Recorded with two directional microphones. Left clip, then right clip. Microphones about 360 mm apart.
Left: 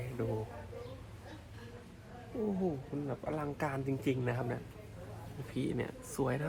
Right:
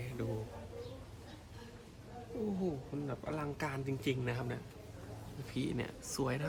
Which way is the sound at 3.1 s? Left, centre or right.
Centre.